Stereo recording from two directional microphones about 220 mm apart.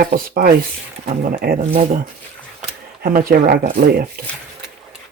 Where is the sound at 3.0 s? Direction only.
40° right (ahead or behind).